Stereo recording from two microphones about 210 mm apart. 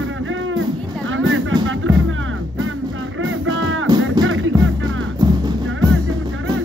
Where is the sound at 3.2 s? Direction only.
70° right (ahead or behind).